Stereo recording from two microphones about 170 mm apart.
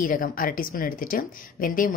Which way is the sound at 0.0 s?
55° left (ahead or behind).